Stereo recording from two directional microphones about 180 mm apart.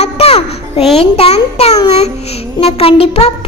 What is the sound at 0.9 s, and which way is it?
A child's voice, 35° left (ahead or behind).